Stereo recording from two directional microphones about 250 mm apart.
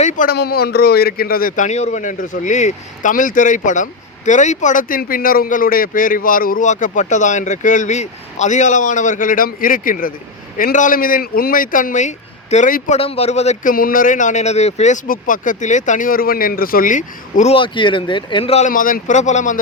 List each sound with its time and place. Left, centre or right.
0.0 s a man's voice: left